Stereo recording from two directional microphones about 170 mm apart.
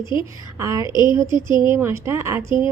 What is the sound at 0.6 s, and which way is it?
A woman's voice, 20° right (ahead or behind).